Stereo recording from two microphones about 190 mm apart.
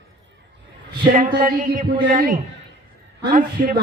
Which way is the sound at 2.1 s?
45° right (ahead or behind).